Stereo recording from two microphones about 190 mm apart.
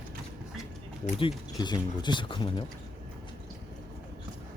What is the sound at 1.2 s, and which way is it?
Speech, 25° left (ahead or behind).